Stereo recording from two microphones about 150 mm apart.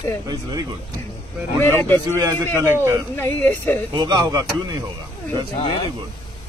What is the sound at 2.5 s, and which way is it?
Speech, 20° right (ahead or behind).